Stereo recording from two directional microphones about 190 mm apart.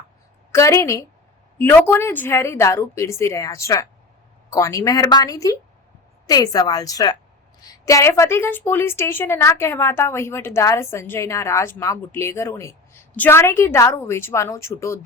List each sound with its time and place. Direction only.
0.5 s a woman's voice: 15° left (ahead or behind)